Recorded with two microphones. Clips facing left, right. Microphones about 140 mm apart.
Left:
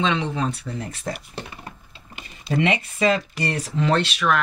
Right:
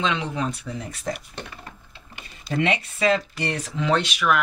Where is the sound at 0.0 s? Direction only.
Centre (ahead or behind).